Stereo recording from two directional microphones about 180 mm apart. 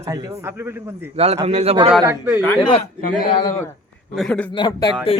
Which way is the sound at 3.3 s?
25° left (ahead or behind).